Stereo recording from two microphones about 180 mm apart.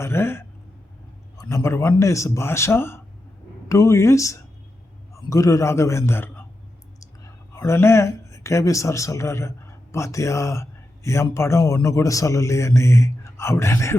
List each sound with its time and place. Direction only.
0.0 s speech: 15° left (ahead or behind)